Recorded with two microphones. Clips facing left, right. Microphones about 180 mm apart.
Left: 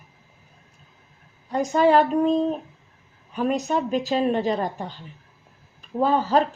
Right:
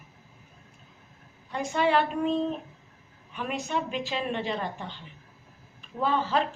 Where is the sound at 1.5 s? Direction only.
40° left (ahead or behind).